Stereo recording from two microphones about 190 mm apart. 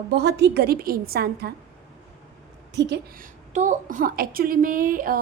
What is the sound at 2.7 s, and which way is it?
Speech, 65° right (ahead or behind).